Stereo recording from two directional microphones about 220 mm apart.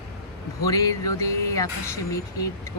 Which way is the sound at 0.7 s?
15° left (ahead or behind).